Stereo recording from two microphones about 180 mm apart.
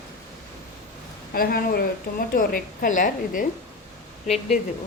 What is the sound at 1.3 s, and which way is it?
A woman's voice, 55° left (ahead or behind).